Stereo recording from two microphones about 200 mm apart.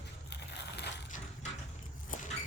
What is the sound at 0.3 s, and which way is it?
Crushing, 55° left (ahead or behind).